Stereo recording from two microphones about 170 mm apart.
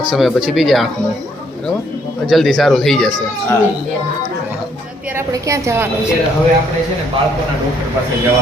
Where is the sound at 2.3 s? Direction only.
Centre (ahead or behind).